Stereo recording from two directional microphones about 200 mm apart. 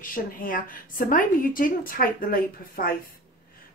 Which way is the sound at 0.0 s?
45° left (ahead or behind).